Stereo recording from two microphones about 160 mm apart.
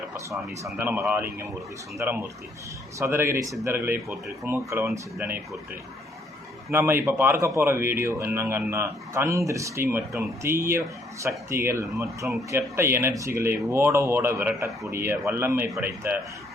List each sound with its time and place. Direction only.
0.3 s speech: 15° right (ahead or behind)
6.7 s speech: 15° right (ahead or behind)